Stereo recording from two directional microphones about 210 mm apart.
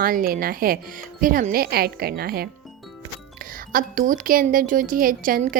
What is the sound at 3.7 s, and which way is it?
Speech, 40° right (ahead or behind).